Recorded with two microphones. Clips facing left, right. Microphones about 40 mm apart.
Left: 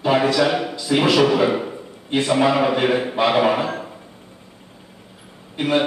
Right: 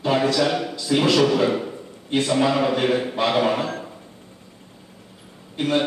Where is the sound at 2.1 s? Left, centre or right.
Centre.